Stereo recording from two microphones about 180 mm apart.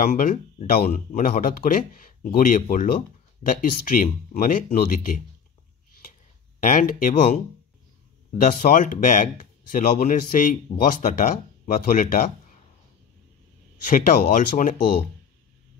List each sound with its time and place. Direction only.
0.0 s speech: 50° left (ahead or behind)
4.0 s speech: 50° left (ahead or behind)
6.6 s speech: 45° left (ahead or behind)
8.4 s speech: 50° left (ahead or behind)
13.8 s speech: 45° left (ahead or behind)